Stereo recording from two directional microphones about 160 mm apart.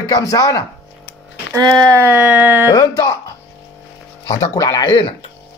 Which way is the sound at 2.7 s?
25° left (ahead or behind).